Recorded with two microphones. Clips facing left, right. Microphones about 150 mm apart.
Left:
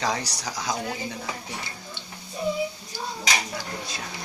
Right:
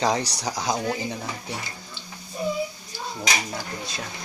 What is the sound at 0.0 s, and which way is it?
Speech, 25° right (ahead or behind).